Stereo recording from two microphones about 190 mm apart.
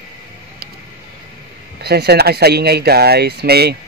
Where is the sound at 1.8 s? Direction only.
60° right (ahead or behind).